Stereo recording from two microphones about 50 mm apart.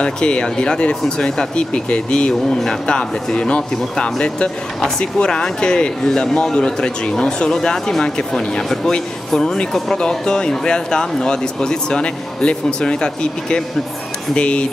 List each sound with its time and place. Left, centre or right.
0.0 s speech: left